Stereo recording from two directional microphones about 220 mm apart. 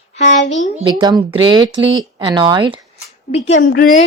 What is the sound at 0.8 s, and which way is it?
Speech, 20° right (ahead or behind).